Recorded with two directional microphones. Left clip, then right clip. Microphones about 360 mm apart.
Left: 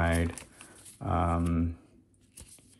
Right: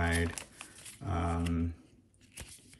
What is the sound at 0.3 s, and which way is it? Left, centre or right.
Crumpling, centre.